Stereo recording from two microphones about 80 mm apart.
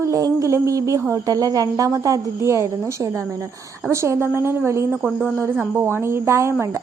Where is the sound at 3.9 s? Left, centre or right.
Right.